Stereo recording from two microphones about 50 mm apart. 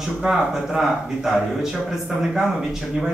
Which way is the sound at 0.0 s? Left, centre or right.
Centre.